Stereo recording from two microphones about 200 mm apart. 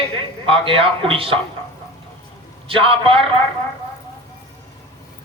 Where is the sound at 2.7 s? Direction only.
25° right (ahead or behind).